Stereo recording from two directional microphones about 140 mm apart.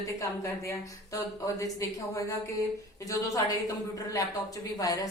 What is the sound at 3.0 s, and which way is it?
A woman's voice, 25° left (ahead or behind).